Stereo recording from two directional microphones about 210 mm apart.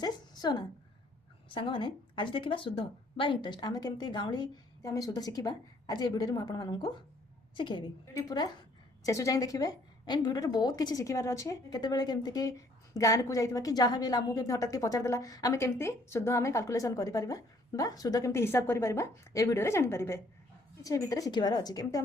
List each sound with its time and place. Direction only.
0.0 s a woman's voice: 20° left (ahead or behind)